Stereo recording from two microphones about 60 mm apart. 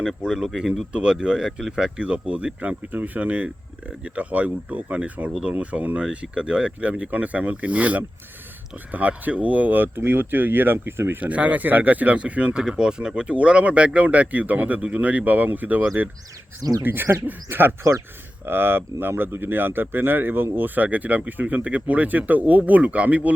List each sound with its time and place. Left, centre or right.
0.2 s speech: centre
5.5 s speech: right
6.0 s speech: centre; by 11.2 s right
11.2 s speech: right